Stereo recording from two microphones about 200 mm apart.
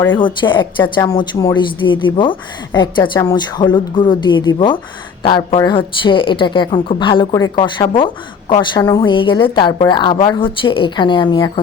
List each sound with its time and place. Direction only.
0.1 s speech: 25° left (ahead or behind)